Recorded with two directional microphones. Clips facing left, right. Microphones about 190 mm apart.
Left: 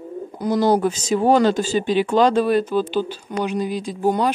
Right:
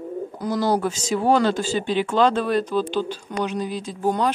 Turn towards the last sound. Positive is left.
turn(degrees=10)  # may be behind; listen again after turning